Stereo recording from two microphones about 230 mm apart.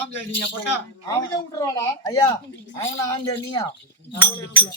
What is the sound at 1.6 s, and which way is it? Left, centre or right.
A man's voice, centre.